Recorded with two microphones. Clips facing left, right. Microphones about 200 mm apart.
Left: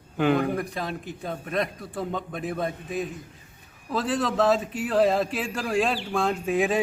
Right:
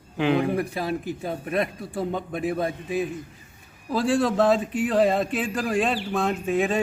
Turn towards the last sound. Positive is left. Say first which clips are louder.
# right 1 dB
turn(degrees=0)  # may be behind; listen again after turning